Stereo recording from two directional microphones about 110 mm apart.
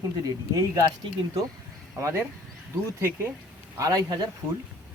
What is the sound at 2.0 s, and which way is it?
Speech, 25° right (ahead or behind).